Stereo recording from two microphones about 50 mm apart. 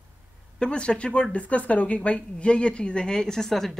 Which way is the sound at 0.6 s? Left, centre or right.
Centre.